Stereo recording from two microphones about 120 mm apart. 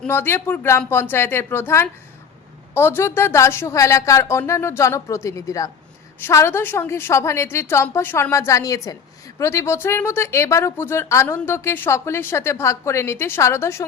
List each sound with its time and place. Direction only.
0.1 s a woman's voice: 20° left (ahead or behind)